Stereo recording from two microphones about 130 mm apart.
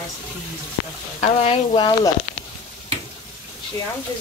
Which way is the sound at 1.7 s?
35° left (ahead or behind).